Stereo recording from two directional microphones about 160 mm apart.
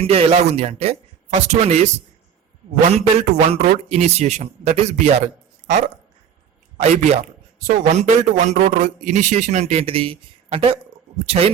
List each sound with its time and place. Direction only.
0.0 s a man's voice: 40° right (ahead or behind)
6.8 s a man's voice: 40° right (ahead or behind)
7.6 s a man's voice: 50° right (ahead or behind)